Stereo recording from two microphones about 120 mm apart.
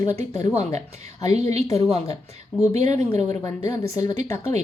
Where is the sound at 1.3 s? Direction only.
60° right (ahead or behind).